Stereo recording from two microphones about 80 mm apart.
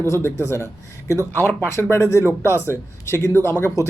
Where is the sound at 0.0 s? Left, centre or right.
Left.